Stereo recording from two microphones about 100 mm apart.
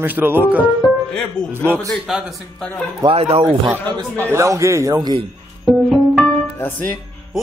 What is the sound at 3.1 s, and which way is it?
Speech, 75° right (ahead or behind).